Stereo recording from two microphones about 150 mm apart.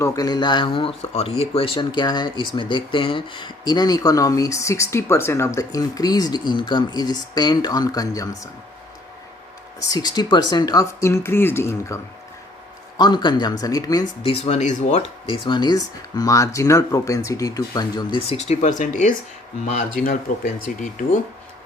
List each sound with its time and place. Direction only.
0.0 s speech: 25° left (ahead or behind)
9.8 s speech: 25° left (ahead or behind)
13.0 s speech: 30° left (ahead or behind)
14.3 s speech: 40° left (ahead or behind)
18.3 s speech: 45° left (ahead or behind)
20.3 s speech: 55° left (ahead or behind)